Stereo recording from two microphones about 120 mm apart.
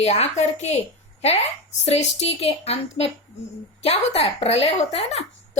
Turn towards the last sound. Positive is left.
turn(degrees=60)  # may be behind; listen again after turning